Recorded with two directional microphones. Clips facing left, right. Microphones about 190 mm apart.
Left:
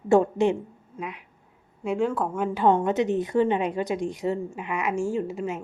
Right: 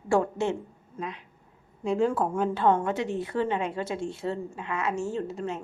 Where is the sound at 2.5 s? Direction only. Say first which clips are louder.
Left 5 dB; 15° left (ahead or behind).